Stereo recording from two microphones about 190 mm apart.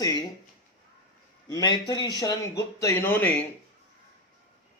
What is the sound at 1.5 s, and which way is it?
Speech, 20° left (ahead or behind).